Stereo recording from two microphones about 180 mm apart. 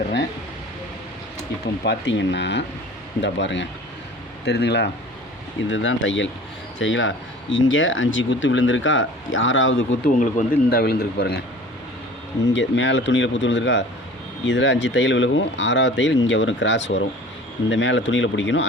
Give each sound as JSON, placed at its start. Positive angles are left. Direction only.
{"t": 1.8, "sound": "speech", "side_deg": 75}
{"t": 3.2, "sound": "a man's voice", "side_deg": 90}
{"t": 4.4, "sound": "speech", "side_deg": 70}
{"t": 5.6, "sound": "speech", "side_deg": 90}
{"t": 10.2, "sound": "speech", "side_deg": 50}
{"t": 12.5, "sound": "a man's voice", "side_deg": 85}